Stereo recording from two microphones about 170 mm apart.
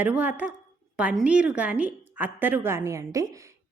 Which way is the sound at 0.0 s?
10° right (ahead or behind).